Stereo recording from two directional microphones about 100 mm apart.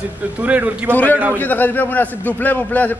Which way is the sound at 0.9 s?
15° left (ahead or behind).